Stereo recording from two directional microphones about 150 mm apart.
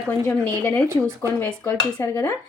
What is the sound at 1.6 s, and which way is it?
Dishes, 20° left (ahead or behind).